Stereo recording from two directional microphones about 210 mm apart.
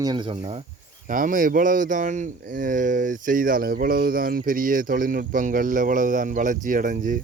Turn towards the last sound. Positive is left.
turn(degrees=-40)  # may be behind; listen again after turning